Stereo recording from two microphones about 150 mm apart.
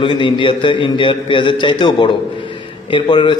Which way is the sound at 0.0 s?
35° left (ahead or behind).